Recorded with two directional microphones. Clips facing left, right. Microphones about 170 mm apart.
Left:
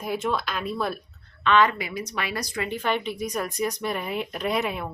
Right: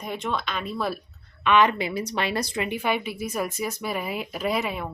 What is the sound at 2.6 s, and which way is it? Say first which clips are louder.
A woman's voice: even; 10° right (ahead or behind).